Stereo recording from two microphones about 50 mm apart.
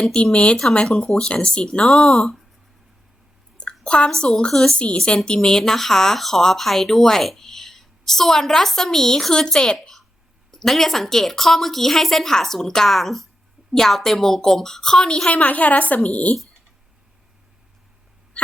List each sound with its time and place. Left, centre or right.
0.0 s speech: centre
2.0 s speech: centre
3.6 s chewing: centre
4.2 s speech: left